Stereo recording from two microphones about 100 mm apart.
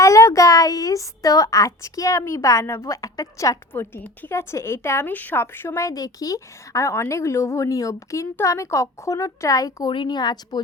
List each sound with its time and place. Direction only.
0.0 s a woman's voice: 30° left (ahead or behind)
3.7 s speech: 20° left (ahead or behind); by 9.9 s 35° left (ahead or behind)
9.9 s speech: 50° left (ahead or behind)